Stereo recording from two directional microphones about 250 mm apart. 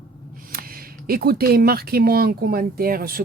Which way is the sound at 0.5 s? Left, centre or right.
Right.